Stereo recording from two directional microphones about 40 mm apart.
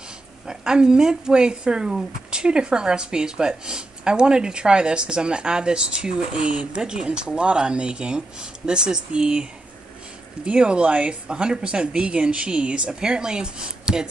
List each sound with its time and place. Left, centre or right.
0.5 s a woman's voice: centre